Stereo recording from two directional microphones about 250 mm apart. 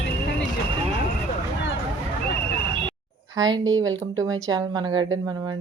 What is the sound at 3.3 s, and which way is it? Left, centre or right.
Speech, centre.